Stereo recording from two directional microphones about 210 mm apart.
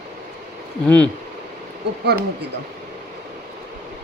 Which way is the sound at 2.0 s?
50° right (ahead or behind).